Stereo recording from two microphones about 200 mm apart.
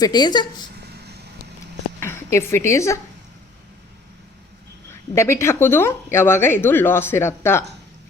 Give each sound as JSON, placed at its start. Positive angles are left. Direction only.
{"t": 0.0, "sound": "speech", "side_deg": 20}
{"t": 2.0, "sound": "a woman's voice", "side_deg": 10}
{"t": 5.1, "sound": "speech", "side_deg": 15}